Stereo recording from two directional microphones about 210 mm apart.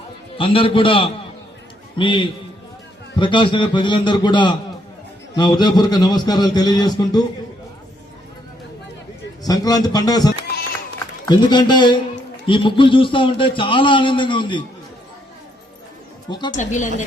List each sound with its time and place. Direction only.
0.3 s a man's voice: 25° left (ahead or behind)
9.5 s a man's voice: 20° left (ahead or behind)
16.3 s a man's voice: 20° left (ahead or behind)
16.6 s speech: 35° left (ahead or behind)